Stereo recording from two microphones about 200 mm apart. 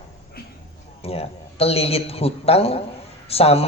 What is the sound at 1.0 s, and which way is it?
Speech, 30° left (ahead or behind).